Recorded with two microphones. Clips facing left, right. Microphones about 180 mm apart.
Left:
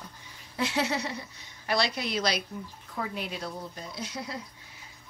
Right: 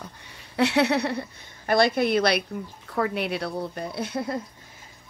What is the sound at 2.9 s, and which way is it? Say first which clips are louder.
Speech: right 9 dB; 70° right (ahead or behind).